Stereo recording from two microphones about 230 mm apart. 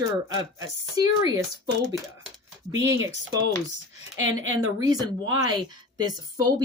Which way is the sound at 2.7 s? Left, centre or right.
Right.